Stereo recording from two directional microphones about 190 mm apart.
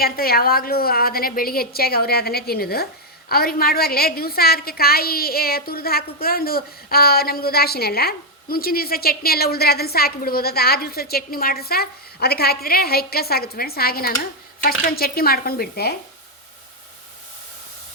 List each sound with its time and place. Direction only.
0.0 s a woman's voice: 50° left (ahead or behind)